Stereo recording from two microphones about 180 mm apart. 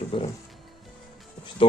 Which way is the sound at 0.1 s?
30° left (ahead or behind).